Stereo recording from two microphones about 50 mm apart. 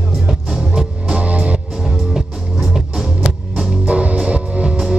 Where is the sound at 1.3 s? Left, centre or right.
Right.